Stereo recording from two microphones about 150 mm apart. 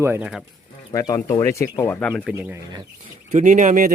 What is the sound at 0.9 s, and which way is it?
Speech, 20° left (ahead or behind).